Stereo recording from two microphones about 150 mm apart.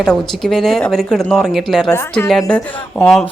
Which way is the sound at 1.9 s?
15° left (ahead or behind).